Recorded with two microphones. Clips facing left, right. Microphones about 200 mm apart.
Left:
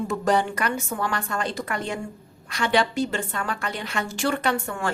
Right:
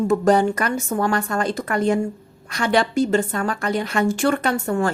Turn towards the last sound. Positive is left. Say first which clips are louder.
# right 5 dB
turn(degrees=-40)  # may be behind; listen again after turning